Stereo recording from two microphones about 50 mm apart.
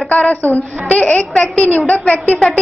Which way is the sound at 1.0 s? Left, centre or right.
Centre.